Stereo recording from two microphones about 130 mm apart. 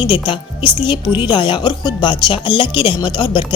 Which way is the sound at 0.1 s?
40° left (ahead or behind).